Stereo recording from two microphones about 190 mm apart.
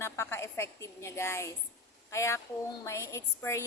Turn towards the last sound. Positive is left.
turn(degrees=15)  # may be behind; listen again after turning